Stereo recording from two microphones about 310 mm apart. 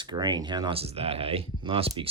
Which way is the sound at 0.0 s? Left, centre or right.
Centre.